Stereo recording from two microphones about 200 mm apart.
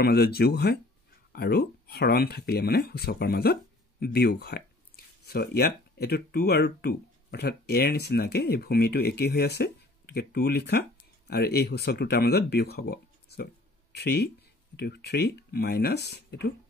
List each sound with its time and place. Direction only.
0.0 s speech: 50° left (ahead or behind)